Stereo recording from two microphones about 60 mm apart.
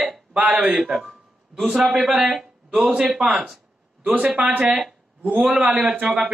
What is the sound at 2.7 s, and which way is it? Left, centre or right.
A man's voice, centre.